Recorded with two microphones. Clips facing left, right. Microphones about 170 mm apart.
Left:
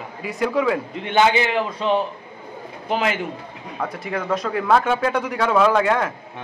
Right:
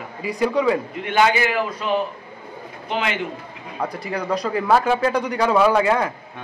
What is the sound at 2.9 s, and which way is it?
Speech, 40° left (ahead or behind).